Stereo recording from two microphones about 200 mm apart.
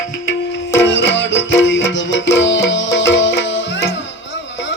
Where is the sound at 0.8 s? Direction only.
65° left (ahead or behind).